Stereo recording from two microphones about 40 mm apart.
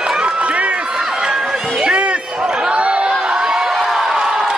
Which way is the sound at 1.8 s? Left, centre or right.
Right.